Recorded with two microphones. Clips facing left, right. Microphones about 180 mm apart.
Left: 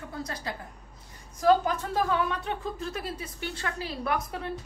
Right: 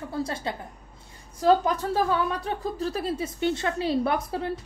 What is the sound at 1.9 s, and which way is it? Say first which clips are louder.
A woman's voice: even; 35° right (ahead or behind).